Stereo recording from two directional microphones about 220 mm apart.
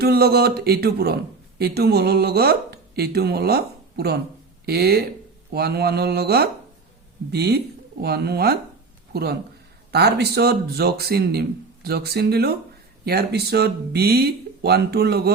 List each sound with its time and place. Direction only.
0.0 s speech: 45° right (ahead or behind)